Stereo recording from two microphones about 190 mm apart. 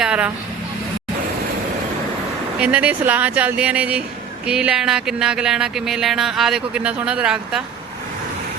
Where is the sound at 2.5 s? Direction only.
5° right (ahead or behind).